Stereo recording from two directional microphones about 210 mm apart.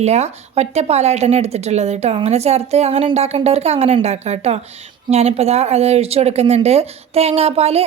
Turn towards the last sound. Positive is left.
turn(degrees=-30)  # may be behind; listen again after turning